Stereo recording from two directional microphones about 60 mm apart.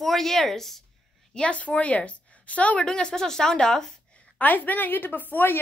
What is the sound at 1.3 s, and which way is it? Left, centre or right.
A woman's voice, centre.